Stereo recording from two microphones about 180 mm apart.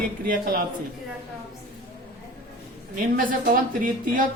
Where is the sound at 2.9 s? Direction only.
50° right (ahead or behind).